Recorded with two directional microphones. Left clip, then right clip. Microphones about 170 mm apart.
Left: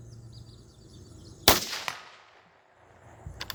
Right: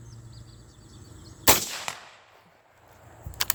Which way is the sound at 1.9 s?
20° left (ahead or behind).